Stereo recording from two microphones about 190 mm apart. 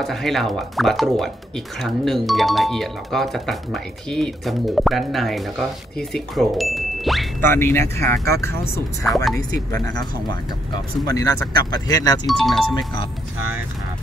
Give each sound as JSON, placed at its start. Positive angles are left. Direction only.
{"t": 0.0, "sound": "speech", "side_deg": 0}
{"t": 7.4, "sound": "speech", "side_deg": 10}
{"t": 9.0, "sound": "speech", "side_deg": 0}
{"t": 11.1, "sound": "speech", "side_deg": 20}
{"t": 12.3, "sound": "speech", "side_deg": 0}